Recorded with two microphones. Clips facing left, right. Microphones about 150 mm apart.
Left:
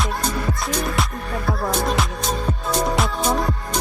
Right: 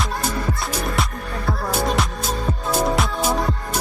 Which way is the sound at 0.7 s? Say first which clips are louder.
Left 1 dB; centre (ahead or behind).